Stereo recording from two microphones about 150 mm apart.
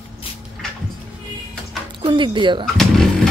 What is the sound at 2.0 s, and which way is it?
Speech, 35° right (ahead or behind).